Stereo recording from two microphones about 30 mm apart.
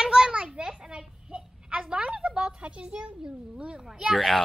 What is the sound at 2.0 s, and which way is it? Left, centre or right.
A woman's voice, right.